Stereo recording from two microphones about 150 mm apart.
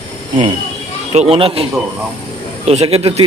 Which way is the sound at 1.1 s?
45° right (ahead or behind).